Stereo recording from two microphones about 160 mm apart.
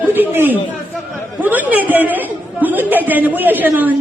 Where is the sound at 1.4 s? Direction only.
10° right (ahead or behind).